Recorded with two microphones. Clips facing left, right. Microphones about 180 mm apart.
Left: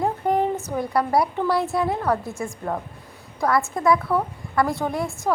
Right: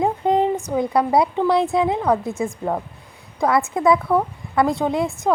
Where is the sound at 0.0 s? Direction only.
20° right (ahead or behind).